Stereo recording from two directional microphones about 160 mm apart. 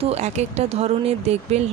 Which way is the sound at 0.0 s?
45° right (ahead or behind).